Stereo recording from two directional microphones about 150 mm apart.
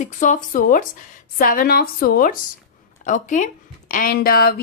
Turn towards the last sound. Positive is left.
turn(degrees=90)